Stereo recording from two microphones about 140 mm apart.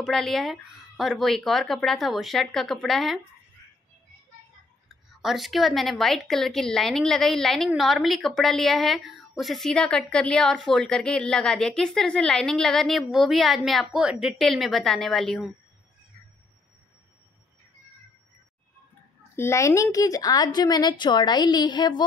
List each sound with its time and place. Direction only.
0.0 s a woman's voice: centre (ahead or behind)
5.2 s a woman's voice: centre (ahead or behind)
19.3 s a woman's voice: 20° left (ahead or behind)